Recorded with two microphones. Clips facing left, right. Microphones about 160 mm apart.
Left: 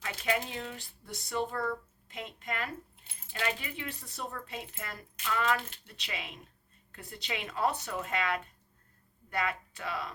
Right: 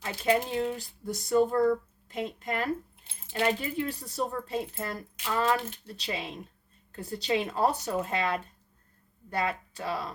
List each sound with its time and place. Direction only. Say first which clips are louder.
0.3 s speech: right 8 dB; 35° right (ahead or behind)